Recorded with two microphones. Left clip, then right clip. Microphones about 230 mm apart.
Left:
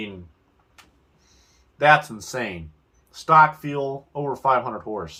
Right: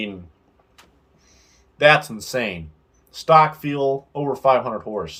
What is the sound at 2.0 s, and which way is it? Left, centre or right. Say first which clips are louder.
Speech: right 3 dB; centre.